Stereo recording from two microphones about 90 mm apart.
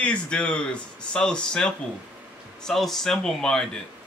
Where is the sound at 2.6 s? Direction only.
5° left (ahead or behind).